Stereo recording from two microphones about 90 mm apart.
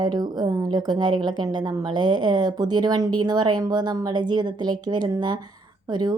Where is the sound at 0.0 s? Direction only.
50° right (ahead or behind).